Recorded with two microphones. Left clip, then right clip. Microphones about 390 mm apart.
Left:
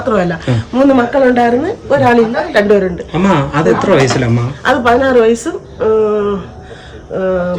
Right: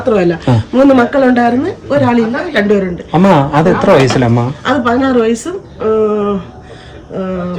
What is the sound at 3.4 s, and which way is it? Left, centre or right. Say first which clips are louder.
Speech: right 2 dB; centre.